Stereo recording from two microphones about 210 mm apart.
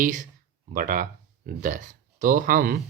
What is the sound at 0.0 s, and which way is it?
Speech, 35° right (ahead or behind).